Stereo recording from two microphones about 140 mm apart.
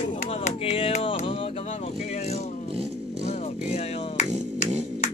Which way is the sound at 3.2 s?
50° left (ahead or behind).